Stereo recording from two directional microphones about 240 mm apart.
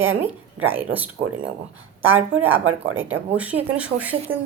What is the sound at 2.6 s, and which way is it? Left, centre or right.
Speech, right.